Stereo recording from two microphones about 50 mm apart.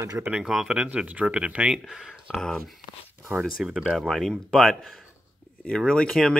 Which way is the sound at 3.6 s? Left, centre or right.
Centre.